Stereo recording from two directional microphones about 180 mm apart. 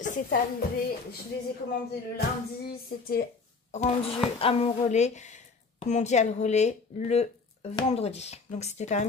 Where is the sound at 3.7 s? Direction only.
40° left (ahead or behind).